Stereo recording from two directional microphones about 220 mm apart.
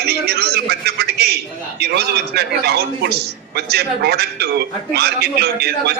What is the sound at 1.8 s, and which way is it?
A man's voice, 45° right (ahead or behind).